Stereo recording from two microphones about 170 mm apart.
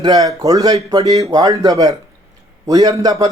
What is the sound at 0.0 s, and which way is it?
A man's voice, 20° right (ahead or behind).